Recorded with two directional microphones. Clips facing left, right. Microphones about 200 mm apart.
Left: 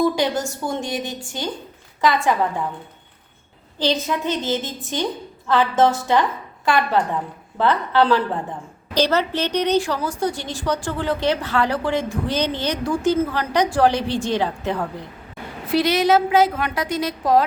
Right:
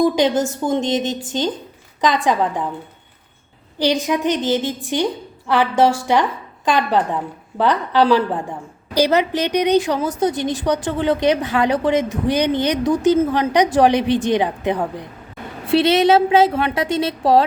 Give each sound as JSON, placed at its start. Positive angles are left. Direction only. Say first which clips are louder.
{"t": 0.0, "sound": "a woman's voice", "louder": "right 4 dB", "side_deg": -20}
{"t": 3.8, "sound": "a woman's voice", "louder": "right 4 dB", "side_deg": -15}
{"t": 15.7, "sound": "a woman's voice", "louder": "right 3 dB", "side_deg": -25}